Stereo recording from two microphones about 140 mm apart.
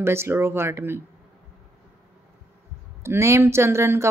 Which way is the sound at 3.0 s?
20° right (ahead or behind).